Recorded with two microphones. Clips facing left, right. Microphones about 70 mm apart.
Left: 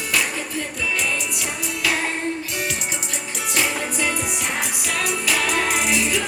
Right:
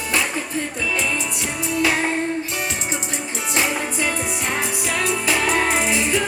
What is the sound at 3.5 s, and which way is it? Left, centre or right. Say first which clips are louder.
Music: right 1 dB; right.